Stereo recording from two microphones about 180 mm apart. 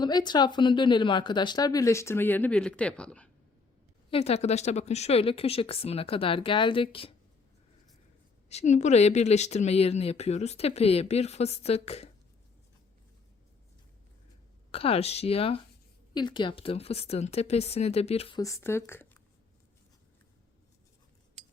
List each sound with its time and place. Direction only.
0.0 s speech: 25° left (ahead or behind); by 3.2 s 5° left (ahead or behind)
4.1 s speech: 35° left (ahead or behind)
8.4 s speech: 40° left (ahead or behind)
14.7 s speech: 30° left (ahead or behind)
18.3 s speech: 15° left (ahead or behind)